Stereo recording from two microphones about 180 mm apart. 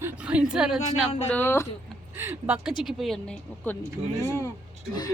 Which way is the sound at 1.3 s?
15° left (ahead or behind).